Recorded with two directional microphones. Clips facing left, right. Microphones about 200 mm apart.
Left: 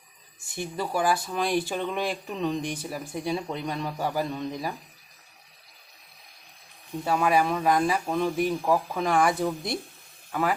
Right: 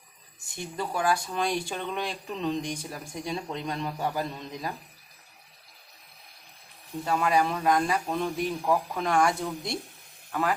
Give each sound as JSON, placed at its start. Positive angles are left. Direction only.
{"t": 0.5, "sound": "speech", "side_deg": 5}
{"t": 7.0, "sound": "speech", "side_deg": 5}